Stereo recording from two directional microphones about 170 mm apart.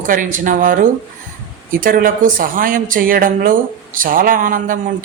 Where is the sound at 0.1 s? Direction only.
50° right (ahead or behind).